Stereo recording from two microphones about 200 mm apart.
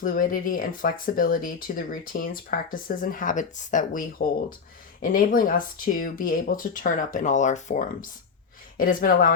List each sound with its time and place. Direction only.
0.0 s speech: 45° left (ahead or behind)
5.1 s speech: 45° left (ahead or behind)